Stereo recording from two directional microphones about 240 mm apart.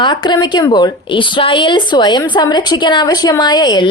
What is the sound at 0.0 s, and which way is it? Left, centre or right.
A woman's voice, centre.